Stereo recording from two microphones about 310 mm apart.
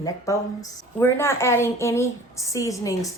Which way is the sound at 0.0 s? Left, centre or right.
Centre.